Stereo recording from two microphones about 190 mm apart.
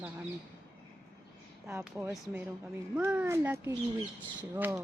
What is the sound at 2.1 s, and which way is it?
A woman's voice, 10° right (ahead or behind).